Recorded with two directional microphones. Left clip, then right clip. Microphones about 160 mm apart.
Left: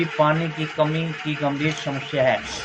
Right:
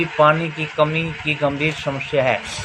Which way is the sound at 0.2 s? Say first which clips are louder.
Right 5 dB; 90° right.